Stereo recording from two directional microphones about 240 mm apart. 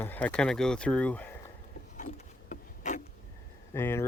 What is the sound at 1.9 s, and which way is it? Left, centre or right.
Wood, left.